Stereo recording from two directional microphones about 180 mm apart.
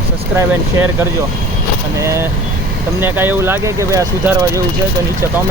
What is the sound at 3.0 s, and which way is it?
Speech, 10° right (ahead or behind).